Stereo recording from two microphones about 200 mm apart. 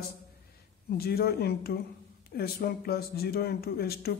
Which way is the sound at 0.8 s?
50° left (ahead or behind).